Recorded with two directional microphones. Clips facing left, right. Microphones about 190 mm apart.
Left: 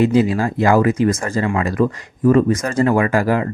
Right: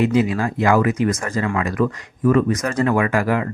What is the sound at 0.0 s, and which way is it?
Speech, 35° left (ahead or behind).